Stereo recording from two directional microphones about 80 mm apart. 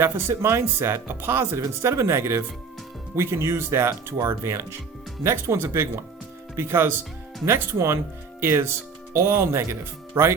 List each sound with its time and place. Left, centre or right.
0.0 s speech: right